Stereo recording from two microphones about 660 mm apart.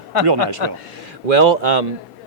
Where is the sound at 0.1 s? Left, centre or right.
Right.